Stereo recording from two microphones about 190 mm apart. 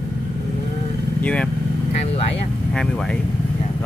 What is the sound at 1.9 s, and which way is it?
Vehicle, 35° left (ahead or behind).